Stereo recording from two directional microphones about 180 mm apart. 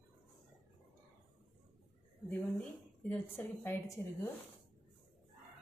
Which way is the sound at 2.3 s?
10° left (ahead or behind).